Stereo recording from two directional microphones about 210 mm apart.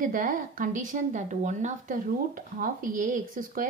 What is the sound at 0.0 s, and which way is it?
A woman's voice, 40° right (ahead or behind).